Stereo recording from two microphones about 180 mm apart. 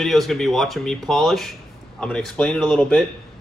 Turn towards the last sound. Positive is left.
turn(degrees=0)  # may be behind; listen again after turning